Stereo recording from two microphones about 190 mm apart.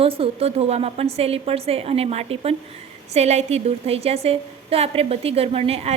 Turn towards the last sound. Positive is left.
turn(degrees=-30)  # may be behind; listen again after turning